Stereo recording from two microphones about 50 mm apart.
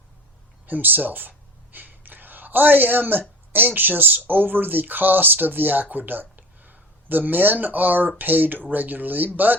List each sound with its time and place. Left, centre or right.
0.7 s speech: right